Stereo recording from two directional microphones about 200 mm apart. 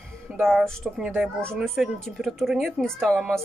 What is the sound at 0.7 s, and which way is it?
A woman's voice, 5° right (ahead or behind).